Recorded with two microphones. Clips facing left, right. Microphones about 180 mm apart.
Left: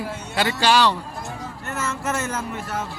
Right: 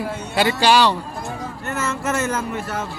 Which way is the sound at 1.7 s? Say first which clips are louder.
Right 3 dB; 80° right.